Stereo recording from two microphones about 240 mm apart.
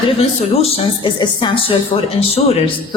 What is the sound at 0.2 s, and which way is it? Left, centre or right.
A woman's voice, left.